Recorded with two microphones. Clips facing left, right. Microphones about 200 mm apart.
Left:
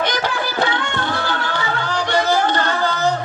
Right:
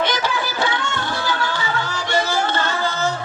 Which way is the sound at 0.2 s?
55° left (ahead or behind).